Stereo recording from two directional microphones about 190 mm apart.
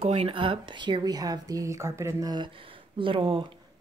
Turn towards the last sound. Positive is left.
turn(degrees=-25)  # may be behind; listen again after turning